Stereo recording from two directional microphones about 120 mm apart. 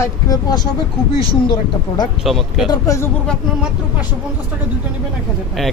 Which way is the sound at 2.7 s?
25° left (ahead or behind).